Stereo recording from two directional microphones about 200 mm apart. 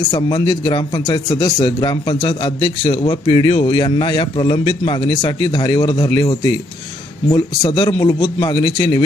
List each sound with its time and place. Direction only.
0.1 s a man's voice: 20° left (ahead or behind)